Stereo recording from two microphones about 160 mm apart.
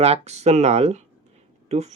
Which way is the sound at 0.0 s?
40° right (ahead or behind).